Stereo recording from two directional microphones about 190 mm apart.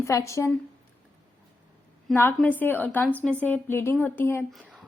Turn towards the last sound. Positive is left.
turn(degrees=0)  # may be behind; listen again after turning